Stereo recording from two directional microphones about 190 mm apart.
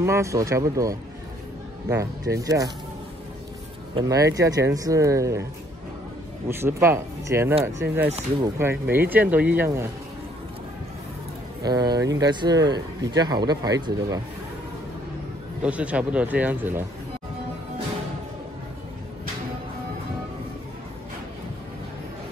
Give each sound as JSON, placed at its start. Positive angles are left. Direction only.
{"t": 0.0, "sound": "speech", "side_deg": -15}
{"t": 3.9, "sound": "speech", "side_deg": -20}
{"t": 6.5, "sound": "speech", "side_deg": -15}
{"t": 11.6, "sound": "speech", "side_deg": -20}
{"t": 15.6, "sound": "speech", "side_deg": -5}